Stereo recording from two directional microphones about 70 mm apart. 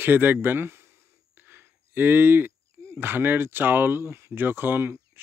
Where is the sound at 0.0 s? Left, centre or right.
Right.